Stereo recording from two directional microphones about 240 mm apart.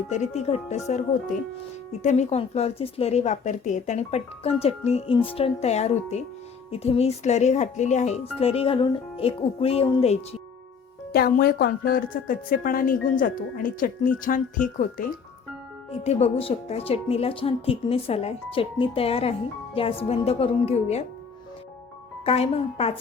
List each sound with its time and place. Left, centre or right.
0.1 s a woman's voice: left
11.1 s a woman's voice: left
22.2 s a woman's voice: left